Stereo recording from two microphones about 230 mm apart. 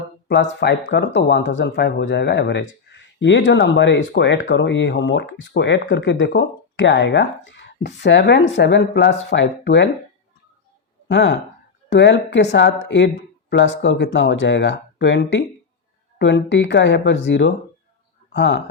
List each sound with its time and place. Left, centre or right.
0.6 s speech: left
11.1 s speech: left